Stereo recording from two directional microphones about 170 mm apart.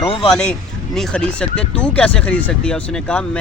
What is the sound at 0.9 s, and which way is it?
Speech, 5° left (ahead or behind).